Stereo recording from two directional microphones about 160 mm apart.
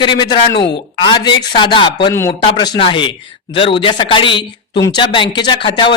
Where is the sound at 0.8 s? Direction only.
30° left (ahead or behind).